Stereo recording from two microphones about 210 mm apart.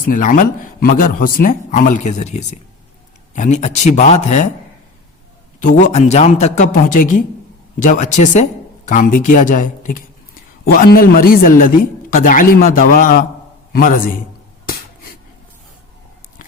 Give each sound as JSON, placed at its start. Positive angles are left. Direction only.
{"t": 0.0, "sound": "a man's voice", "side_deg": 40}
{"t": 5.5, "sound": "a man's voice", "side_deg": 35}